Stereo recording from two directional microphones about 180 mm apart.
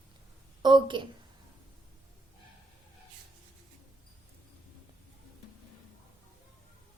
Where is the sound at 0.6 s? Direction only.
25° right (ahead or behind).